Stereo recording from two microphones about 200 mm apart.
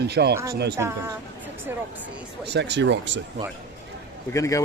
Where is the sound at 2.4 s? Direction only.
55° right (ahead or behind).